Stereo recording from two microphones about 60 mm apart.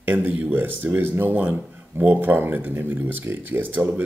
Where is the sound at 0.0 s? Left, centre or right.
Right.